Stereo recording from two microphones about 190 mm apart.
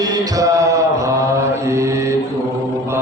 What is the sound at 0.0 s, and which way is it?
Mantra, 15° right (ahead or behind).